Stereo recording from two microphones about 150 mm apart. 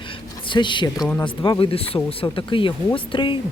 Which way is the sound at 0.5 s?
30° left (ahead or behind).